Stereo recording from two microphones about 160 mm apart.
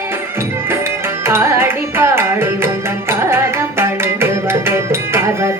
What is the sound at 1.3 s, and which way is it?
Carnatic music, 15° right (ahead or behind).